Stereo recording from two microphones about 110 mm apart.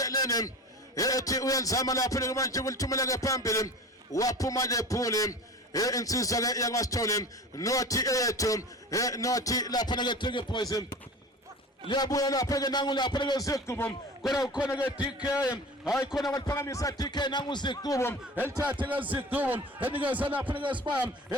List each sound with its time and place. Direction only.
0.0 s a sound: 35° left (ahead or behind)
0.9 s a man's voice: 30° left (ahead or behind)
14.2 s a man's voice: 5° right (ahead or behind)
15.2 s a man's voice: 30° left (ahead or behind)
16.0 s a man's voice: centre (ahead or behind)
16.3 s a man's voice: 30° left (ahead or behind)
18.6 s speech: 15° right (ahead or behind)
20.7 s speech: 50° right (ahead or behind)